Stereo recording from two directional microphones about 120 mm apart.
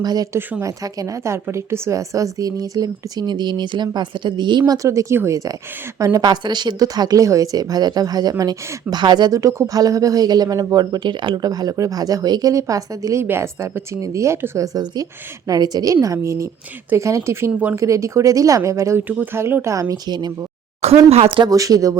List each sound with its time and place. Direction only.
0.0 s a woman's voice: 35° right (ahead or behind)
21.1 s speech: 50° right (ahead or behind)
21.5 s a woman's voice: 30° right (ahead or behind)